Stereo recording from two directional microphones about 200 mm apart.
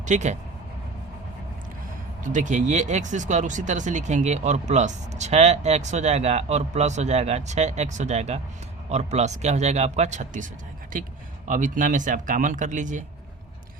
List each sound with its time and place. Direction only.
0.0 s speech: 35° right (ahead or behind)
2.2 s speech: 40° right (ahead or behind)